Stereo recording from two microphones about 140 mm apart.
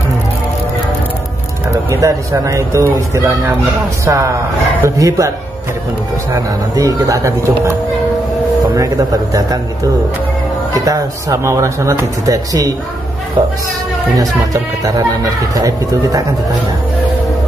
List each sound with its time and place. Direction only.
1.9 s speech: 20° right (ahead or behind)
6.3 s speech: 25° right (ahead or behind)
8.7 s speech: 25° right (ahead or behind)
10.7 s speech: 25° right (ahead or behind)
14.1 s speech: 25° right (ahead or behind)